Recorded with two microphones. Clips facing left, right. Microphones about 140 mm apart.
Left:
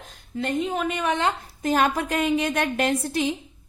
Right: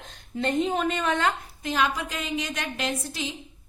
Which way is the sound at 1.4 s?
45° left (ahead or behind).